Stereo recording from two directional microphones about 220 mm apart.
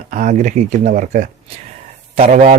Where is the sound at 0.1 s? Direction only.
35° right (ahead or behind).